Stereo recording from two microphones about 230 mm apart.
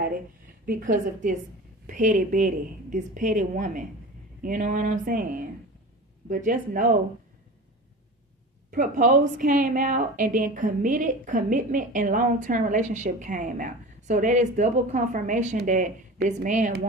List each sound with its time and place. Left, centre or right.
0.7 s a woman's voice: right
8.6 s a woman's voice: right